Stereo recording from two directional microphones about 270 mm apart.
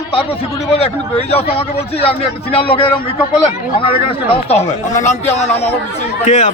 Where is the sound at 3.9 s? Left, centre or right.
Left.